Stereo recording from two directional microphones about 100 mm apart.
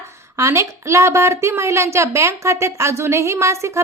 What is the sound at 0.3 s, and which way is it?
Speech, 30° right (ahead or behind).